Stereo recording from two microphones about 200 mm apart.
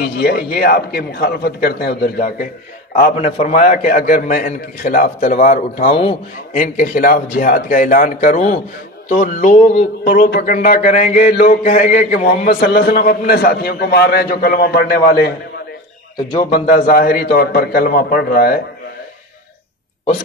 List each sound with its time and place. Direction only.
0.0 s a man's voice: 50° left (ahead or behind)
3.2 s a man's voice: 30° left (ahead or behind)
6.5 s a man's voice: 40° left (ahead or behind)
16.7 s a man's voice: 45° left (ahead or behind)